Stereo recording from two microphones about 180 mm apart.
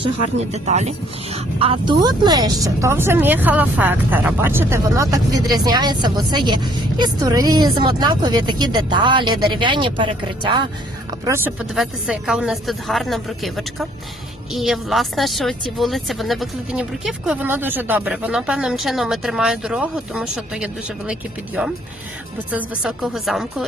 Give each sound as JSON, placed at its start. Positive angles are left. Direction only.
{"t": 0.5, "sound": "speech", "side_deg": -40}
{"t": 11.3, "sound": "speech", "side_deg": -10}
{"t": 11.6, "sound": "speech", "side_deg": 0}